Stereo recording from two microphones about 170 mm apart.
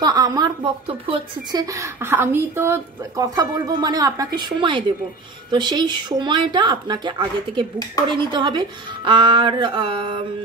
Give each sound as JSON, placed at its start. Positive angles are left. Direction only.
{"t": 0.0, "sound": "speech", "side_deg": -20}